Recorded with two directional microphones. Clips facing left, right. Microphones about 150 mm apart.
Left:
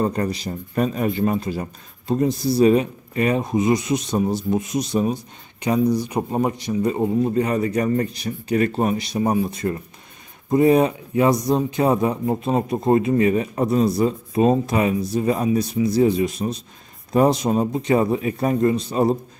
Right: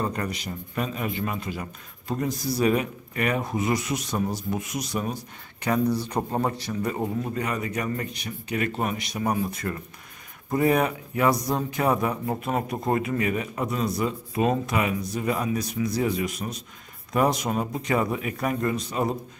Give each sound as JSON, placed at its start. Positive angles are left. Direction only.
{"t": 0.0, "sound": "a man's voice", "side_deg": 30}